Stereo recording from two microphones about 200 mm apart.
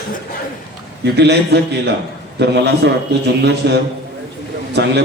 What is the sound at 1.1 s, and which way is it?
A man's voice, 55° right (ahead or behind).